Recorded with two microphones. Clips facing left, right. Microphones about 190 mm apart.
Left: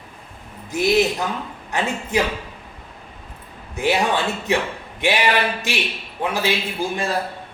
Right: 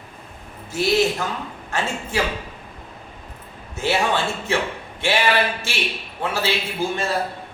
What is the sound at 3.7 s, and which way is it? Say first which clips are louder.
Speech: left 1 dB; 15° left (ahead or behind).